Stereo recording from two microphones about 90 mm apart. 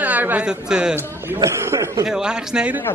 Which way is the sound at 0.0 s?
20° right (ahead or behind).